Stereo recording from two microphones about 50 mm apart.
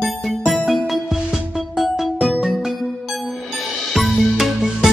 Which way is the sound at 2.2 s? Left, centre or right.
Centre.